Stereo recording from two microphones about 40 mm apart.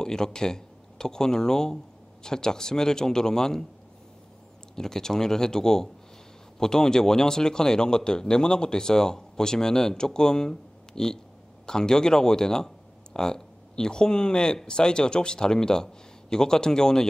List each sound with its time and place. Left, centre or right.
0.0 s a man's voice: centre
4.7 s a man's voice: centre